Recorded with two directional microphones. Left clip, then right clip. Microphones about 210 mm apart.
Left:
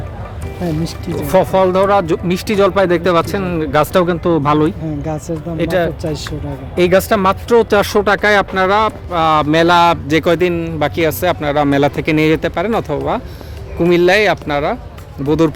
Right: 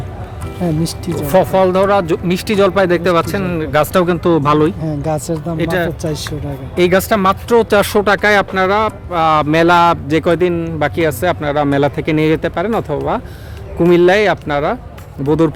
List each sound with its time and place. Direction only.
1.1 s speech: 5° right (ahead or behind)
4.0 s speech: 10° right (ahead or behind)
5.5 s speech: 5° left (ahead or behind)
6.0 s speech: 30° right (ahead or behind)
6.7 s speech: centre (ahead or behind)
13.7 s speech: 15° right (ahead or behind)